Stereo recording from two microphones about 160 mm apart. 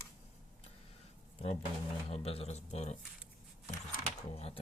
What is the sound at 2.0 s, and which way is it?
Speech, 35° left (ahead or behind).